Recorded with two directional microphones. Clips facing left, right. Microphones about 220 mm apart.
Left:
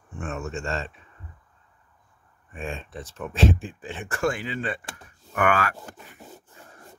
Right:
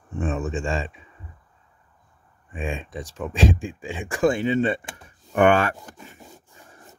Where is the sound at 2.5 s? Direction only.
15° right (ahead or behind).